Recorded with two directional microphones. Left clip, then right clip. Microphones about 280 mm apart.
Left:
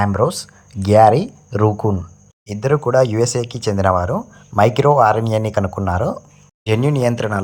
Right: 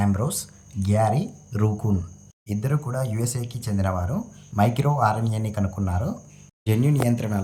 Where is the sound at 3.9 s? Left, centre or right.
Left.